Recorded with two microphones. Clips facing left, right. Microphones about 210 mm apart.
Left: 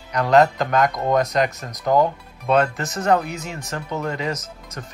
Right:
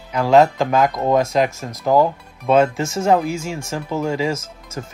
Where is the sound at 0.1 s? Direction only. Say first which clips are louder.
Right 2 dB; centre (ahead or behind).